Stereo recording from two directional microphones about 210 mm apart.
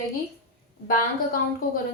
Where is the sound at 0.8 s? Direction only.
40° left (ahead or behind).